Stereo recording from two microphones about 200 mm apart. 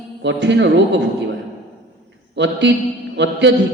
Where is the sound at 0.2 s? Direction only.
60° right (ahead or behind).